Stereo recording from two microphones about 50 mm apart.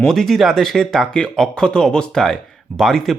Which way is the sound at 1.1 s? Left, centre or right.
Centre.